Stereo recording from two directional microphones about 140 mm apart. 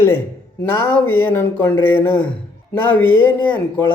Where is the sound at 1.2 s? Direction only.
15° left (ahead or behind).